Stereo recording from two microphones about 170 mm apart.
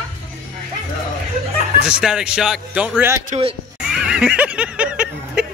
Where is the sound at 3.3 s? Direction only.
40° right (ahead or behind).